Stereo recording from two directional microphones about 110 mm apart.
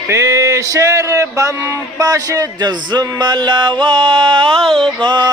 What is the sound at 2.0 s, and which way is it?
Music, 30° right (ahead or behind).